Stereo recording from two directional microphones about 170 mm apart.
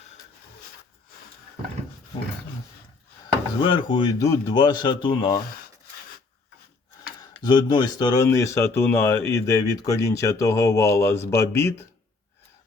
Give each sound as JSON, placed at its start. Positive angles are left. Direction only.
{"t": 3.6, "sound": "speech", "side_deg": 30}
{"t": 7.3, "sound": "speech", "side_deg": 25}